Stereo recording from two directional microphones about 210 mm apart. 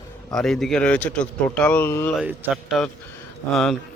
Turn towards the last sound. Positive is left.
turn(degrees=0)  # may be behind; listen again after turning